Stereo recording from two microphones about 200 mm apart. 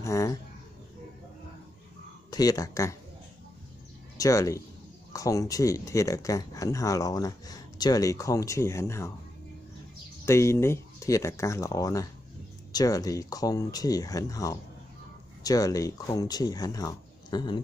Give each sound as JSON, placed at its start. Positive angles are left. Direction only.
{"t": 0.0, "sound": "speech", "side_deg": 15}
{"t": 2.3, "sound": "speech", "side_deg": 15}
{"t": 4.2, "sound": "speech", "side_deg": 15}
{"t": 10.2, "sound": "speech", "side_deg": 15}